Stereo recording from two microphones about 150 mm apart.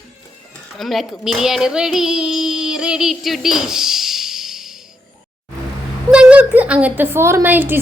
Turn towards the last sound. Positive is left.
turn(degrees=-10)  # may be behind; listen again after turning